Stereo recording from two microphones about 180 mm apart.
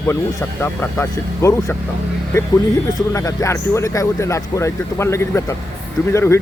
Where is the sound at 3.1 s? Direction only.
15° left (ahead or behind).